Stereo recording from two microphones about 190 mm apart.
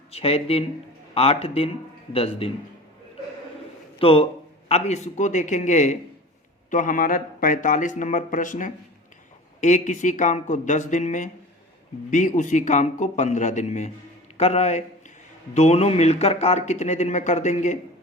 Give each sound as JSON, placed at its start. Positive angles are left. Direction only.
{"t": 0.1, "sound": "speech", "side_deg": 30}
{"t": 3.9, "sound": "a man's voice", "side_deg": 30}